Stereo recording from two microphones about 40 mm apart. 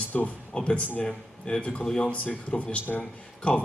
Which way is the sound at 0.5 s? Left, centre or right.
Left.